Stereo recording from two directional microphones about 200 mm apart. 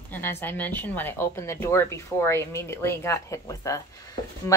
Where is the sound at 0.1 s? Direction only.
10° left (ahead or behind).